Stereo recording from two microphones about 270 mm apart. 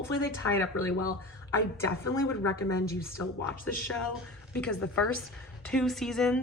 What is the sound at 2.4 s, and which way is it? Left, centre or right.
Speech, left.